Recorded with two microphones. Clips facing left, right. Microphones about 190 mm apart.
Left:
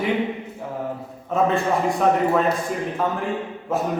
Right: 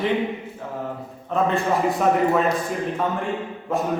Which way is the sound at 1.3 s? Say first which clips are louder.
Left 1 dB; centre (ahead or behind).